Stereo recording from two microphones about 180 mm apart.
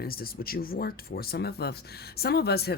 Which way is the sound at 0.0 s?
55° left (ahead or behind).